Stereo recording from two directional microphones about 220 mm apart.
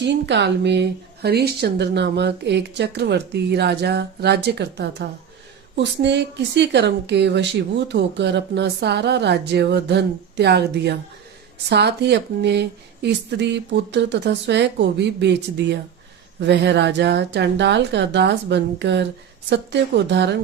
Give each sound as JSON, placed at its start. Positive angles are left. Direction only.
{"t": 0.0, "sound": "a woman's voice", "side_deg": -50}